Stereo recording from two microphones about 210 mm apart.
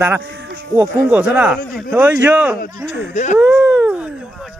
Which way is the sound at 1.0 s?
5° right (ahead or behind).